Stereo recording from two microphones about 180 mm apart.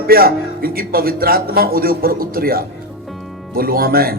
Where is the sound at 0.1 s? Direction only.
55° right (ahead or behind).